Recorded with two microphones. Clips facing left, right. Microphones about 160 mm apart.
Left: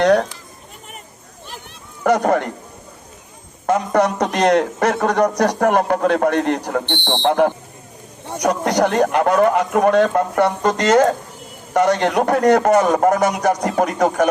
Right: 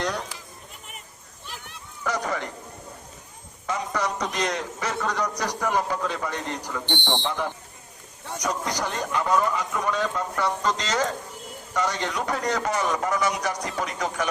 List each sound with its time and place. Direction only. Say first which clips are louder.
0.0 s children playing: left 15 dB; 70° left (ahead or behind)
2.0 s speech: left 12 dB; 55° left (ahead or behind)
3.7 s a man's voice: left 11 dB; 60° left (ahead or behind)